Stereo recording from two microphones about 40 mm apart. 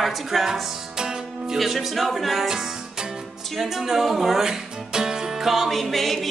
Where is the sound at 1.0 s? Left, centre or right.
Centre.